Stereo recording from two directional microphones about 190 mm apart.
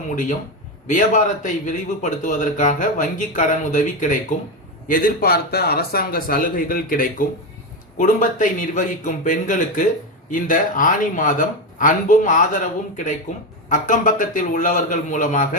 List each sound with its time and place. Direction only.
0.9 s a man's voice: 40° left (ahead or behind)
13.7 s speech: 40° left (ahead or behind)